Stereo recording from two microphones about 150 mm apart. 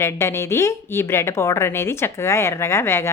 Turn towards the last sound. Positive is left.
turn(degrees=15)  # may be behind; listen again after turning